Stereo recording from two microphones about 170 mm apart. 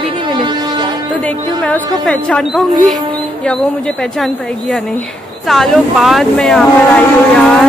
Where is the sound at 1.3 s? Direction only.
5° left (ahead or behind).